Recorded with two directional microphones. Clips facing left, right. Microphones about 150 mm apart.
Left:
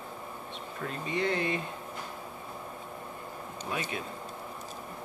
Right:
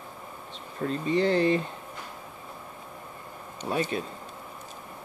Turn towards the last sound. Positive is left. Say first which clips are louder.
# right 6 dB
turn(degrees=-35)  # may be behind; listen again after turning